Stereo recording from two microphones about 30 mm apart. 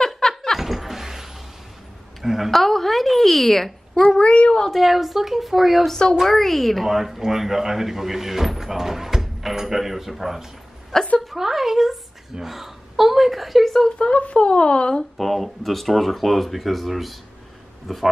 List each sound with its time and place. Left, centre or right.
0.0 s a sound: centre
0.6 s a sound: centre
2.2 s speech: centre
2.5 s speech: centre
4.2 s speech: left
4.7 s speech: centre
6.2 s speech: centre
6.9 s speech: centre
10.9 s a sound: centre
11.3 s speech: centre
13.8 s speech: left
15.1 s speech: centre